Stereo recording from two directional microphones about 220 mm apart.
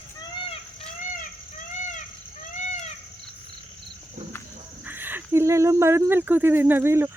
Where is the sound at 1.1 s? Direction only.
35° left (ahead or behind).